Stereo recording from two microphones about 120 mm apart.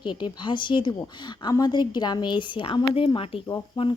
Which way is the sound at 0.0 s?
40° left (ahead or behind).